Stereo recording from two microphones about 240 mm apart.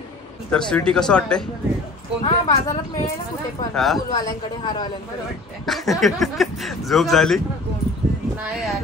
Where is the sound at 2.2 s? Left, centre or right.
Centre.